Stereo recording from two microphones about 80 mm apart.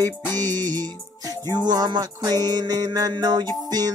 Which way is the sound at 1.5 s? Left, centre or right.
Right.